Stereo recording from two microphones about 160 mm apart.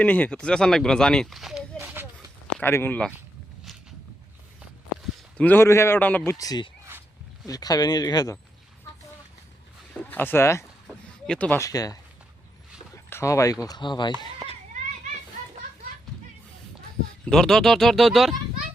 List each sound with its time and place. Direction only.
0.0 s speech: 10° left (ahead or behind)
1.8 s a sound: 15° right (ahead or behind)
2.6 s a man's voice: 10° left (ahead or behind)
5.4 s a man's voice: 15° left (ahead or behind)
6.3 s speech: 25° left (ahead or behind)
10.1 s a man's voice: 10° left (ahead or behind)
11.6 s speech: 20° left (ahead or behind)
13.1 s speech: 15° left (ahead or behind)
17.2 s speech: 5° left (ahead or behind)